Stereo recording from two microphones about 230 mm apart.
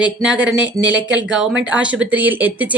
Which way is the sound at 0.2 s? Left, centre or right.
Centre.